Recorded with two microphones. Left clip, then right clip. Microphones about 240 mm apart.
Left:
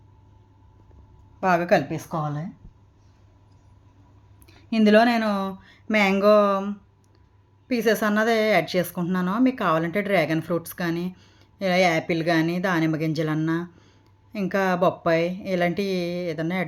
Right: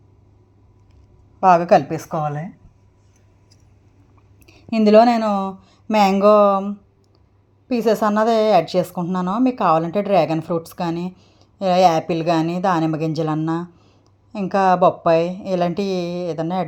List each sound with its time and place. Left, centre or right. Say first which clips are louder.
1.4 s a woman's voice: right 7 dB; centre
2.0 s a woman's voice: right 6 dB; centre
4.4 s a woman's voice: right 4 dB; centre